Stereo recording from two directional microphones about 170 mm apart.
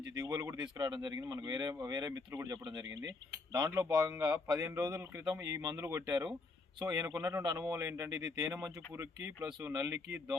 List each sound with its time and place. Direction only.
0.1 s speech: 20° right (ahead or behind)